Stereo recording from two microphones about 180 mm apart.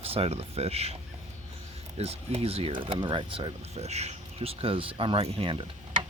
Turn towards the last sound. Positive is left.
turn(degrees=-30)  # may be behind; listen again after turning